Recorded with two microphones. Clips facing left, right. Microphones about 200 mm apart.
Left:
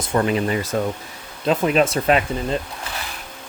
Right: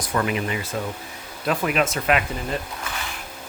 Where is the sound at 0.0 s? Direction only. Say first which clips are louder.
Left 4 dB; 30° left (ahead or behind).